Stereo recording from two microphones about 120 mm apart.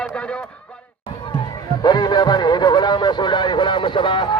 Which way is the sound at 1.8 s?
35° left (ahead or behind).